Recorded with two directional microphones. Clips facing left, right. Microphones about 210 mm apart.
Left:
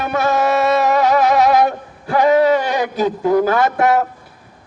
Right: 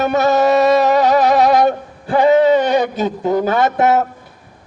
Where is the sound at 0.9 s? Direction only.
30° right (ahead or behind).